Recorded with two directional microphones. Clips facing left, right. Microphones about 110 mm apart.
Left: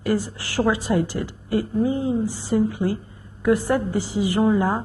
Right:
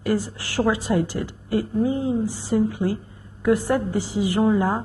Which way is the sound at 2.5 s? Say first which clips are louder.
Even; 15° left (ahead or behind).